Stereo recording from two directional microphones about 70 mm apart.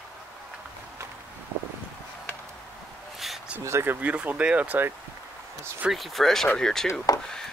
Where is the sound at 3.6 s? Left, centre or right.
Right.